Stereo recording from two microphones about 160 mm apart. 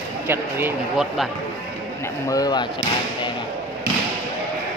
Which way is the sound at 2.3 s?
25° left (ahead or behind).